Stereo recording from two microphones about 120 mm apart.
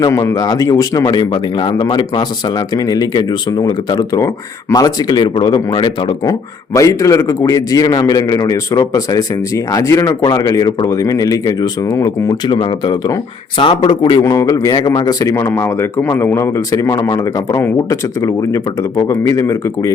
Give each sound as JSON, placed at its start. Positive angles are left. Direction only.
{"t": 0.0, "sound": "speech", "side_deg": 25}
{"t": 6.7, "sound": "a man's voice", "side_deg": 25}
{"t": 12.5, "sound": "a man's voice", "side_deg": 40}